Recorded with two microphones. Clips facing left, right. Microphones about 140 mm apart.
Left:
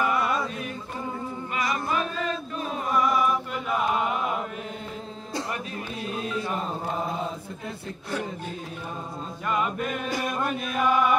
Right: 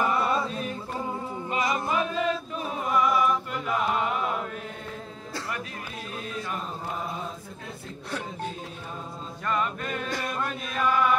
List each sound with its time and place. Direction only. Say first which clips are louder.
0.0 s music: even; 30° right (ahead or behind)
1.5 s singing: right 1 dB; 25° right (ahead or behind)
2.8 s music: even; centre (ahead or behind)
9.5 s male singing: left 2 dB; 10° left (ahead or behind)
10.7 s chant: left 1 dB; 10° left (ahead or behind)